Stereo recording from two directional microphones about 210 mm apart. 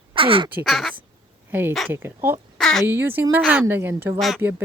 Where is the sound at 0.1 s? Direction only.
25° right (ahead or behind).